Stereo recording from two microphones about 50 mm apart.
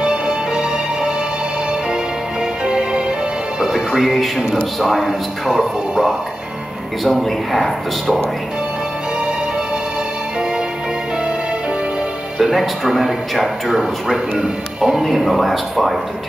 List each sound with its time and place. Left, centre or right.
0.0 s music: centre
2.6 s music: centre
4.7 s speech: centre
5.5 s speech: centre
7.1 s speech: centre
12.4 s speech: centre